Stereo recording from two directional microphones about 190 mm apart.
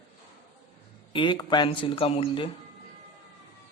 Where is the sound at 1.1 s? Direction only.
25° left (ahead or behind).